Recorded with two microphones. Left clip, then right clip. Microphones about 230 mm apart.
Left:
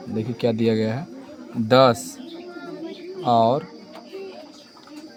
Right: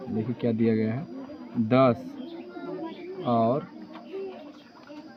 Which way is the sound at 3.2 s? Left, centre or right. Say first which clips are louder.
Left 7 dB; left.